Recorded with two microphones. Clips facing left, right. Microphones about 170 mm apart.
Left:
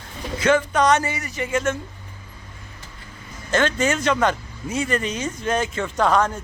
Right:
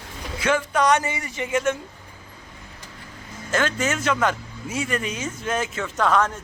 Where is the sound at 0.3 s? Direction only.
10° right (ahead or behind).